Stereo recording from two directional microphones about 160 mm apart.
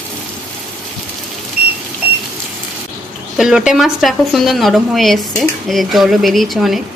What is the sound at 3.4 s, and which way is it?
Speech, 5° right (ahead or behind).